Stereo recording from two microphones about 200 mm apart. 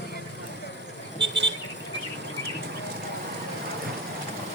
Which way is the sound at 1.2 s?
65° right (ahead or behind).